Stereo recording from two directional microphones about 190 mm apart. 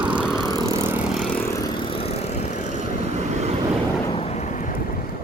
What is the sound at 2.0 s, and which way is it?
Vehicle, 35° left (ahead or behind).